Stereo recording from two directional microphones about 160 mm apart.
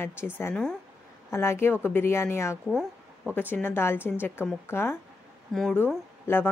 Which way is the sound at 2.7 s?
5° right (ahead or behind).